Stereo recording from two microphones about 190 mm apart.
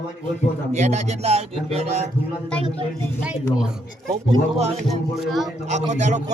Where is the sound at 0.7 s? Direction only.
40° right (ahead or behind).